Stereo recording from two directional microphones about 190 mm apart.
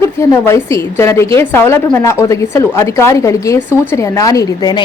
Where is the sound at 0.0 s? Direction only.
15° left (ahead or behind).